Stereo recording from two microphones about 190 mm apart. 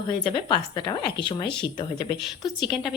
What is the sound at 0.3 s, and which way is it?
A woman's voice, 25° left (ahead or behind).